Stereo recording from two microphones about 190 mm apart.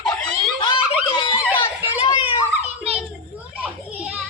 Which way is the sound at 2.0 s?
25° left (ahead or behind).